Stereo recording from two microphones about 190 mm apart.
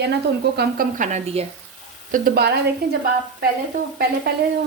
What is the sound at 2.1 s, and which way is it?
Speech, 55° right (ahead or behind).